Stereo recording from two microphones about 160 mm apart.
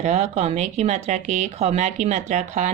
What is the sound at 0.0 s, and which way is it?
Speech, 45° right (ahead or behind).